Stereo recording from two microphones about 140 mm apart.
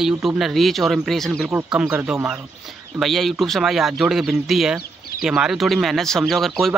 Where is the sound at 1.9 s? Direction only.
10° right (ahead or behind).